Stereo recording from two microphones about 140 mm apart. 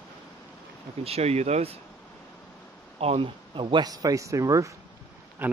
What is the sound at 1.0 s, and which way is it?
Speech, 50° right (ahead or behind).